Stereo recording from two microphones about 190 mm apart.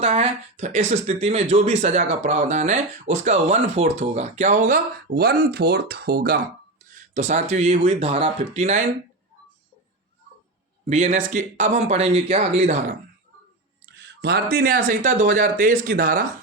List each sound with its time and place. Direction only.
0.0 s speech: 35° right (ahead or behind); by 6.4 s 55° right (ahead or behind)
7.1 s speech: 40° right (ahead or behind)
10.8 s speech: 35° right (ahead or behind)
14.0 s a sound: 60° right (ahead or behind)
14.5 s speech: 50° right (ahead or behind)